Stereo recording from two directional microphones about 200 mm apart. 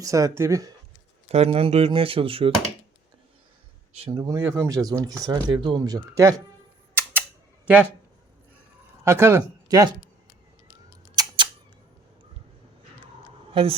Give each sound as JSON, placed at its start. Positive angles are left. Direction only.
{"t": 0.0, "sound": "speech", "side_deg": -15}
{"t": 1.3, "sound": "speech", "side_deg": -30}
{"t": 4.0, "sound": "speech", "side_deg": -20}
{"t": 7.6, "sound": "speech", "side_deg": -5}
{"t": 9.0, "sound": "speech", "side_deg": -10}
{"t": 11.1, "sound": "a sound", "side_deg": -20}
{"t": 13.5, "sound": "speech", "side_deg": -25}